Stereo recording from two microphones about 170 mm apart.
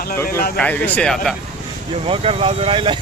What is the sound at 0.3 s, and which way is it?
Speech, 60° left (ahead or behind).